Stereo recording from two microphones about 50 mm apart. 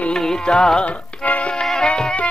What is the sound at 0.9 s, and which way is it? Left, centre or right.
Music, left.